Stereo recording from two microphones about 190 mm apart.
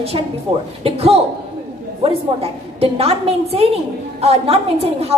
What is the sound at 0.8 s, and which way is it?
A woman's voice, 30° right (ahead or behind).